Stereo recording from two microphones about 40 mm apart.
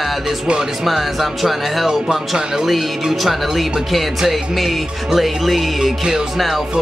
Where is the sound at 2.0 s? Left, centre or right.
Centre.